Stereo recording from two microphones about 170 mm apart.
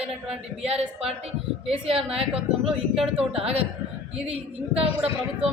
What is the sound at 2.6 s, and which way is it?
Speech, 5° right (ahead or behind).